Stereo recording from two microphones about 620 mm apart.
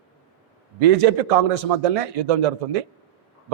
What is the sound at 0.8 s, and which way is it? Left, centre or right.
A man's voice, right.